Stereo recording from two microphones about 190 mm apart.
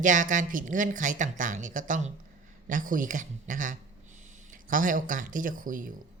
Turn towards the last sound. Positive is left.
turn(degrees=-45)  # may be behind; listen again after turning